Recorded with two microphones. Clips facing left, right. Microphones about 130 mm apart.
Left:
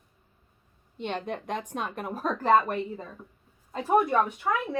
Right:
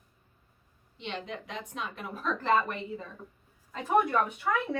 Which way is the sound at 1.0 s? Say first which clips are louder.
Left 6 dB; 50° left (ahead or behind).